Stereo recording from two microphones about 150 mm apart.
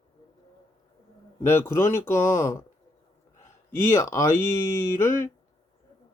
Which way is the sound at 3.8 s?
15° left (ahead or behind).